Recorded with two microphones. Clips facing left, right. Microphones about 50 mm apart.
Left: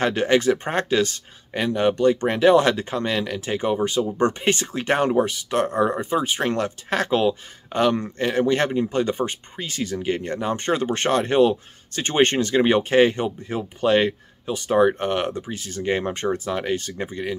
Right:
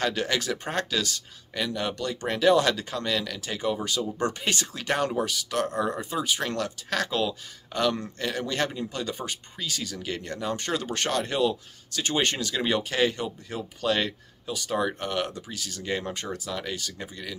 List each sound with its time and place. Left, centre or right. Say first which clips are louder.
0.0 s speech: left 8 dB; left